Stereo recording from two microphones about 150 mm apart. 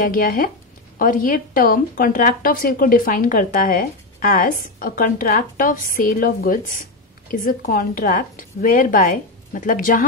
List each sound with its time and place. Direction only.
0.0 s a woman's voice: 70° left (ahead or behind)